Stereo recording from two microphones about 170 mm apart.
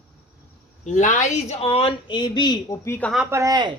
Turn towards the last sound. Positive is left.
turn(degrees=-20)  # may be behind; listen again after turning